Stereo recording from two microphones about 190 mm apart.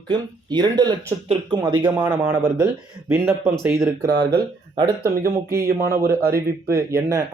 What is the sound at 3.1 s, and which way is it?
Speech, 10° right (ahead or behind).